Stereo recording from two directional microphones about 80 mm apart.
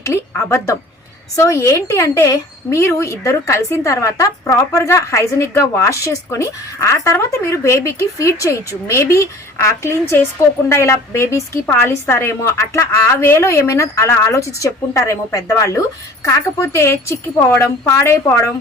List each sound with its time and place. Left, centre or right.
0.0 s speech: left